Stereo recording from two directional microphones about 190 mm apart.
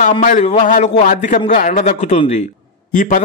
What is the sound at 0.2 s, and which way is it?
A man's voice, 40° left (ahead or behind).